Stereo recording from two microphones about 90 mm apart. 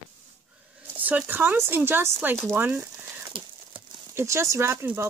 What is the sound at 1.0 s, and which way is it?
Speech, 20° right (ahead or behind).